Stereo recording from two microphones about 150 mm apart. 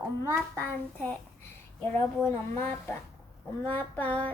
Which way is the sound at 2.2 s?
15° left (ahead or behind).